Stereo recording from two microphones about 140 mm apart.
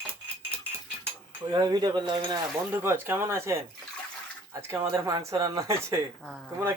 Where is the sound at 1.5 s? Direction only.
30° right (ahead or behind).